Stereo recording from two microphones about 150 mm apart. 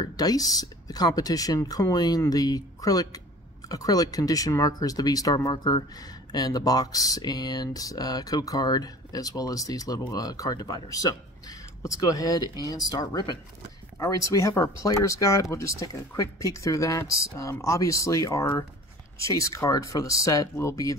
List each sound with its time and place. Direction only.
0.0 s speech: 25° left (ahead or behind)